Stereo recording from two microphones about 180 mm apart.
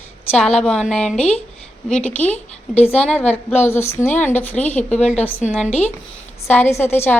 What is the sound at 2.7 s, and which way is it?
Speech, 35° left (ahead or behind).